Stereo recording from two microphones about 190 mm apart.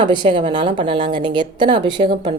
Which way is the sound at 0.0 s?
25° right (ahead or behind).